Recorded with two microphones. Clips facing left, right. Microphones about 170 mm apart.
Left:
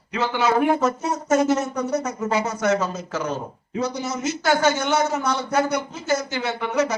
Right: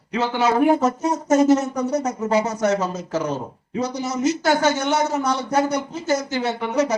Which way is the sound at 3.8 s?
40° right (ahead or behind).